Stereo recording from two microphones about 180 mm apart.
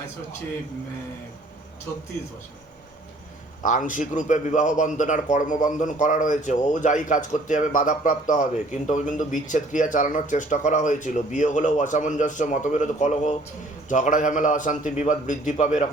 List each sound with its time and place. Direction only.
3.6 s a man's voice: 45° left (ahead or behind)